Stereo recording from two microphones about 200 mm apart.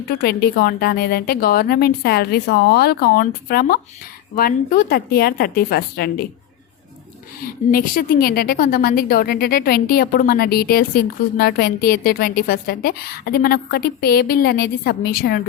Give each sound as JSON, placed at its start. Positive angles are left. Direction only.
{"t": 0.2, "sound": "a woman's voice", "side_deg": 50}
{"t": 7.4, "sound": "a woman's voice", "side_deg": 45}